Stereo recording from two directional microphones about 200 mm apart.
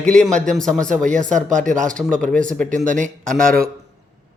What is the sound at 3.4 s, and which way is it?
Speech, 45° right (ahead or behind).